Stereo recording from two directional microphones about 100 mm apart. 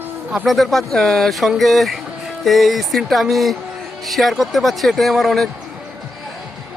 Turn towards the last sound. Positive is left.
turn(degrees=0)  # may be behind; listen again after turning